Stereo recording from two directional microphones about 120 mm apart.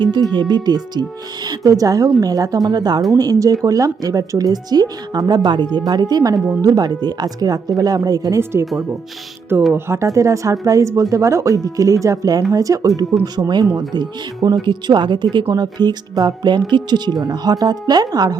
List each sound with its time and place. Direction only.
0.0 s speech: 40° right (ahead or behind)
9.7 s speech: 25° right (ahead or behind)